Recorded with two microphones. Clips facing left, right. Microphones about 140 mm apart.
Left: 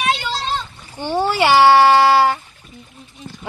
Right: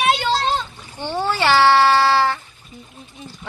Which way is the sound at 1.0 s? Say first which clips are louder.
Left 4 dB; 15° left (ahead or behind).